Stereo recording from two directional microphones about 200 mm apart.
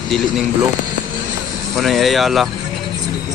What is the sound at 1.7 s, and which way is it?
Speech, centre (ahead or behind).